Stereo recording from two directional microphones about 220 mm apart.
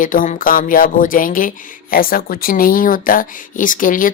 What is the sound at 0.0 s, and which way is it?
Speech, 40° left (ahead or behind).